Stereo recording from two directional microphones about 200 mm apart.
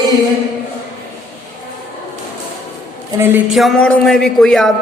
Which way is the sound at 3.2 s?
10° right (ahead or behind).